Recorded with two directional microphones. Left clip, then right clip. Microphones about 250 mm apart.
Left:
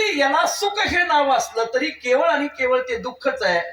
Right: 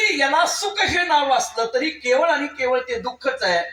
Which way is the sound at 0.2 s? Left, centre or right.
Left.